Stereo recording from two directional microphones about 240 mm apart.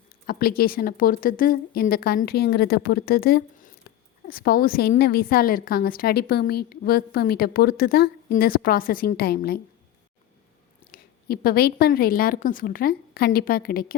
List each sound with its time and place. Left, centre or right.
0.3 s a woman's voice: left
10.9 s a woman's voice: left